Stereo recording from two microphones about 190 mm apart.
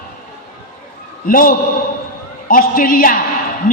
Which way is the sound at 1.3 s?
50° left (ahead or behind).